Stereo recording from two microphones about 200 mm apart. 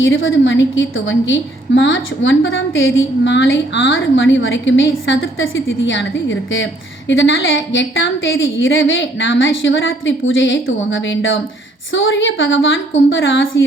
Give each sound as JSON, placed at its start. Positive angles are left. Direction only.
{"t": 0.0, "sound": "a woman's voice", "side_deg": 75}